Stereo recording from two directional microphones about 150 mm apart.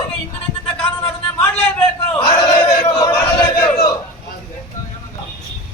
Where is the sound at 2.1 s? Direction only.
30° left (ahead or behind).